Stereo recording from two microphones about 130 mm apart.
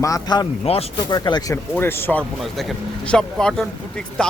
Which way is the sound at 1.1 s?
30° left (ahead or behind).